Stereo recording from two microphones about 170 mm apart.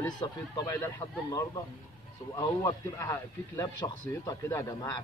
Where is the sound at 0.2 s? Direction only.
25° left (ahead or behind).